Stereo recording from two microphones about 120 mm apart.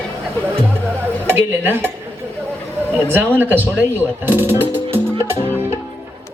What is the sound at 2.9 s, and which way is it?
Speech, 15° right (ahead or behind).